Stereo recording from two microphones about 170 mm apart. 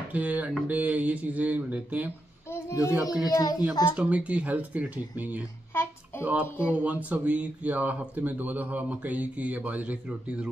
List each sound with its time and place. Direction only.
0.1 s speech: 10° right (ahead or behind)
2.5 s child singing: 20° left (ahead or behind)
2.9 s a child's voice: centre (ahead or behind)
3.3 s a child's voice: 20° left (ahead or behind)
3.9 s speech: 5° right (ahead or behind)
5.7 s a sound: 15° left (ahead or behind)
6.2 s speech: 10° right (ahead or behind)